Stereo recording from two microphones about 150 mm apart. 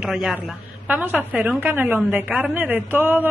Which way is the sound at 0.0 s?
5° right (ahead or behind).